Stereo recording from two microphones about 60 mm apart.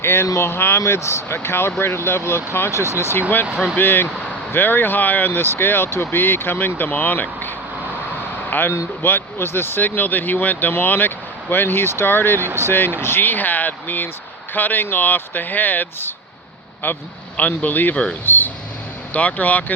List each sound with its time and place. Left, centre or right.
0.0 s speech: left
0.8 s a man's voice: left
17.9 s speech: centre
18.3 s a man's voice: left